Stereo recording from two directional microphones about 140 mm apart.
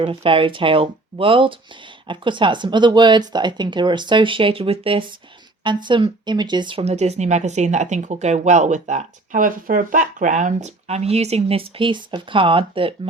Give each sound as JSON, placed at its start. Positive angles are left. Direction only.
{"t": 0.0, "sound": "speech", "side_deg": -40}
{"t": 6.8, "sound": "speech", "side_deg": -50}